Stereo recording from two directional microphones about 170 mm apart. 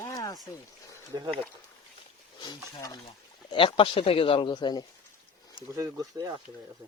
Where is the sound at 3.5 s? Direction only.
30° left (ahead or behind).